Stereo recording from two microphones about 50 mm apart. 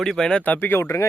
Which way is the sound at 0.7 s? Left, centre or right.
Left.